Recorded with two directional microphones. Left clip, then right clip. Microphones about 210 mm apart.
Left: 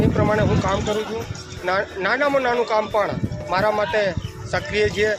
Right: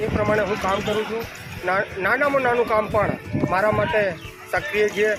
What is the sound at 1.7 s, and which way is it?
Speech, 5° left (ahead or behind).